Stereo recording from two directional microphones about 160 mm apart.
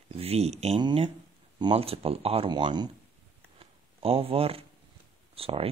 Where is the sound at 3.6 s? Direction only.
35° right (ahead or behind).